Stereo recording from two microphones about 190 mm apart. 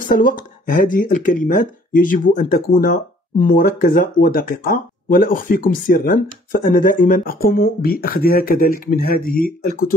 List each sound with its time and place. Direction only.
0.0 s speech: 45° left (ahead or behind)